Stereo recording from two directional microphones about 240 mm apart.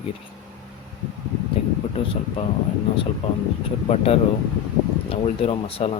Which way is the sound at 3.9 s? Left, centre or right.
Left.